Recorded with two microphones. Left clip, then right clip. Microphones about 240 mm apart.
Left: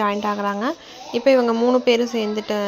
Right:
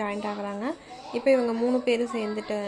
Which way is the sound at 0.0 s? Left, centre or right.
Left.